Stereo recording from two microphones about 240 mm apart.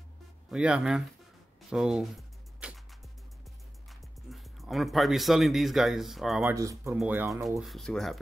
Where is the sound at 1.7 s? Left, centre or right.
Centre.